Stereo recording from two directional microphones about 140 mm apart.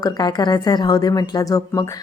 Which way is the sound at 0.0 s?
30° left (ahead or behind).